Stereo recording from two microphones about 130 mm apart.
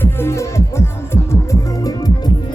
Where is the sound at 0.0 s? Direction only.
20° left (ahead or behind).